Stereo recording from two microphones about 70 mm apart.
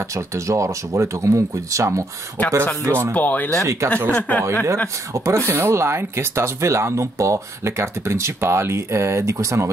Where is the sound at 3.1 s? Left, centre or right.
Left.